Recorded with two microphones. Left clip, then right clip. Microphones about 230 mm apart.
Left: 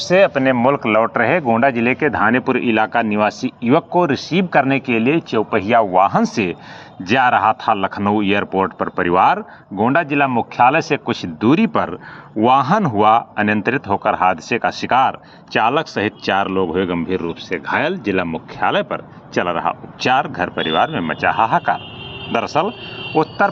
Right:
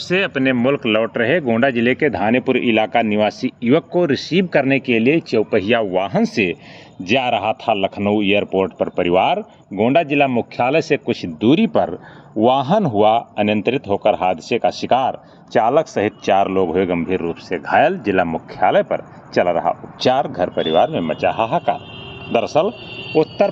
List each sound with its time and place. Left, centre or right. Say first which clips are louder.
0.1 s speech: left 5 dB; centre
8.0 s speech: left 1 dB; left
8.6 s speech: even; centre
9.7 s speech: right 1 dB; centre
10.3 s speech: left 3 dB; centre